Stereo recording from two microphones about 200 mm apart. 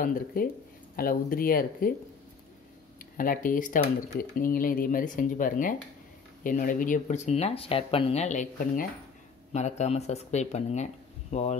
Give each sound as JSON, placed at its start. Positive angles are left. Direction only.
{"t": 0.0, "sound": "speech", "side_deg": 45}
{"t": 3.2, "sound": "speech", "side_deg": 45}